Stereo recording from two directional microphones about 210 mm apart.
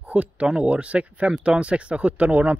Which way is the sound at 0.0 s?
5° right (ahead or behind).